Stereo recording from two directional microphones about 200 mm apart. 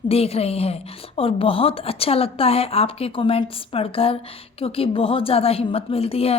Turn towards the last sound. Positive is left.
turn(degrees=30)  # may be behind; listen again after turning